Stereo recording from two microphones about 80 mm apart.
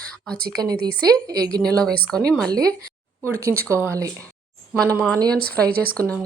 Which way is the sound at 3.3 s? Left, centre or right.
Right.